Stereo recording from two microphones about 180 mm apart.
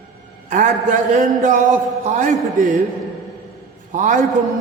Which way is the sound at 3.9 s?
45° right (ahead or behind).